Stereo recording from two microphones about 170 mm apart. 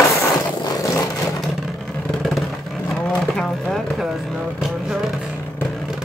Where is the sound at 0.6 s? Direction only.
20° left (ahead or behind).